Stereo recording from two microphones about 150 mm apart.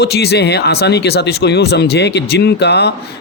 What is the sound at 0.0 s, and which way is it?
Speech, 90° left.